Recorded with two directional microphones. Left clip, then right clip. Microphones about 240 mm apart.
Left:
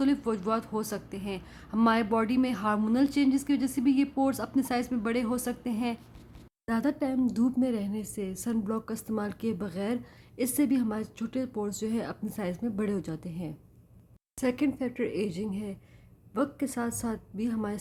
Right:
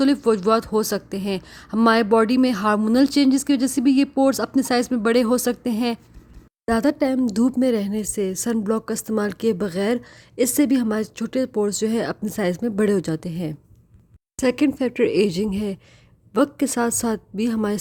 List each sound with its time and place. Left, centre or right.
0.0 s speech: right